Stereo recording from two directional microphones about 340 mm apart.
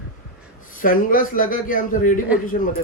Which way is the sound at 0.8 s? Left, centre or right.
Left.